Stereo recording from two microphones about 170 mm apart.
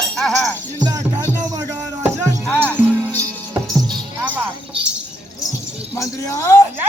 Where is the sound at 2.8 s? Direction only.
10° left (ahead or behind).